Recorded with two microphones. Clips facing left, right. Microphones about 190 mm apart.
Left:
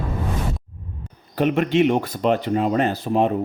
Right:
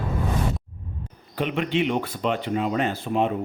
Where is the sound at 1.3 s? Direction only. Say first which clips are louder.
Left 6 dB; 45° left (ahead or behind).